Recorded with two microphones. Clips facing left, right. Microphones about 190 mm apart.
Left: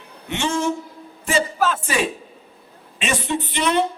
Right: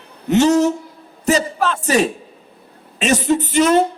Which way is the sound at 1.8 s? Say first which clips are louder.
Right 7 dB; 40° right (ahead or behind).